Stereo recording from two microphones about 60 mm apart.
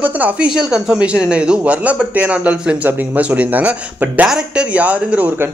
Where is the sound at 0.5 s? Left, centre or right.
Centre.